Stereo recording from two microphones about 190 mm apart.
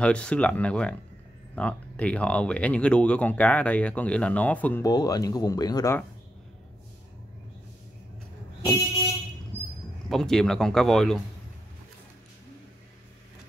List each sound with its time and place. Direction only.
0.0 s speech: 5° left (ahead or behind)
4.8 s speech: 20° left (ahead or behind)
10.0 s speech: centre (ahead or behind)